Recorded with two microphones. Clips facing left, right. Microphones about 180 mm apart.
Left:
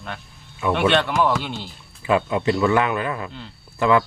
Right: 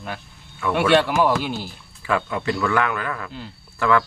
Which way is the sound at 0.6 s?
20° left (ahead or behind).